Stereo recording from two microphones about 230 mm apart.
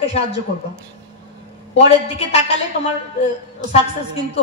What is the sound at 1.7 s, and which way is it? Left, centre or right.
Speech, left.